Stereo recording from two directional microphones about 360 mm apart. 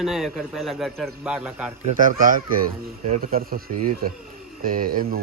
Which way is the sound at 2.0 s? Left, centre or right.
Right.